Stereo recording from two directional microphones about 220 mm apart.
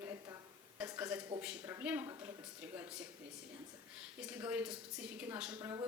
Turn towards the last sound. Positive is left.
turn(degrees=-10)  # may be behind; listen again after turning